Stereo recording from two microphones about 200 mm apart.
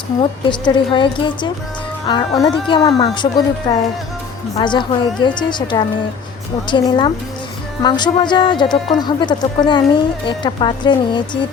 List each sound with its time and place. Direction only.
0.2 s speech: 20° left (ahead or behind)